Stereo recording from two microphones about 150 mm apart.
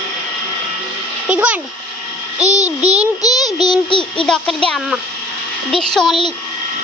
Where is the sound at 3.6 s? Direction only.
30° left (ahead or behind).